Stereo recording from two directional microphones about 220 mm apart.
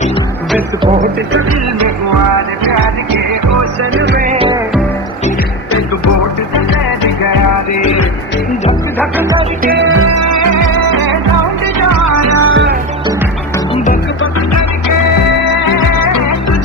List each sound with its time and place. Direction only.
3.9 s music: 50° right (ahead or behind)
4.3 s hum: 25° right (ahead or behind)
9.9 s music: 75° right (ahead or behind)
12.3 s music: 75° right (ahead or behind)